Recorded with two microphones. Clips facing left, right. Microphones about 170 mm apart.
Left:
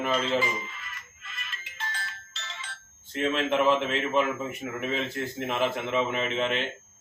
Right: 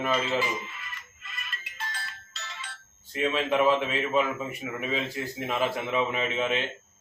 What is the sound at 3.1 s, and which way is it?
A man's voice, 5° right (ahead or behind).